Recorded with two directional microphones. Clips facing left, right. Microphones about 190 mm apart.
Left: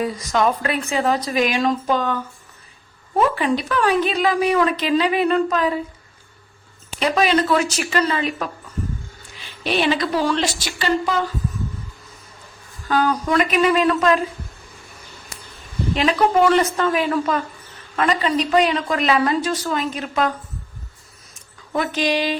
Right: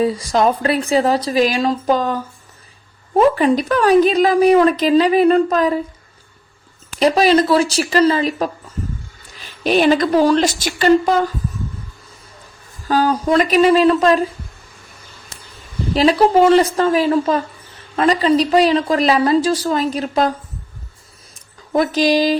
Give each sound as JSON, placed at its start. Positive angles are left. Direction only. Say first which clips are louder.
{"t": 0.0, "sound": "speech", "louder": "right 4 dB", "side_deg": -30}
{"t": 3.2, "sound": "speech", "louder": "right 6 dB", "side_deg": -40}
{"t": 7.0, "sound": "a woman's voice", "louder": "right 5 dB", "side_deg": -35}
{"t": 12.9, "sound": "speech", "louder": "right 4 dB", "side_deg": -35}
{"t": 16.0, "sound": "speech", "louder": "right 5 dB", "side_deg": -35}
{"t": 21.7, "sound": "speech", "louder": "right 6 dB", "side_deg": -35}